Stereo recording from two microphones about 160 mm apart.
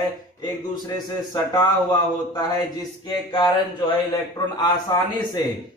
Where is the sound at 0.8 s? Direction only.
25° left (ahead or behind).